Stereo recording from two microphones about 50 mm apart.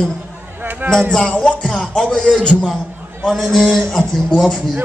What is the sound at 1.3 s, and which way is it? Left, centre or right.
Music, centre.